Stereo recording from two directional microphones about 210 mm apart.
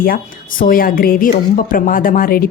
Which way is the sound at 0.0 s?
45° left (ahead or behind).